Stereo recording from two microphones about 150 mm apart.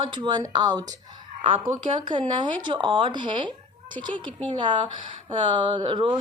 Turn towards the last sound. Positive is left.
turn(degrees=-35)  # may be behind; listen again after turning